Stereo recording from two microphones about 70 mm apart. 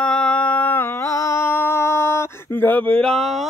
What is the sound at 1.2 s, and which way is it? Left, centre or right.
Music, left.